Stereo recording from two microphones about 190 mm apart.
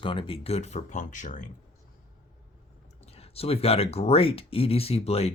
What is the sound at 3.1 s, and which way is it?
Speech, 30° left (ahead or behind).